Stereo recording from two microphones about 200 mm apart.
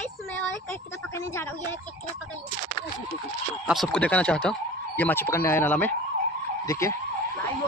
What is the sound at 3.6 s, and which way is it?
Speech, centre (ahead or behind).